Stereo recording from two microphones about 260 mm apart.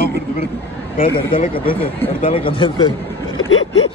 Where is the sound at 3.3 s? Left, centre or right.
Left.